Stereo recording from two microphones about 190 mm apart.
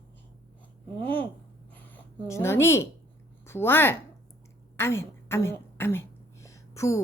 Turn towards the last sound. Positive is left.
turn(degrees=15)  # may be behind; listen again after turning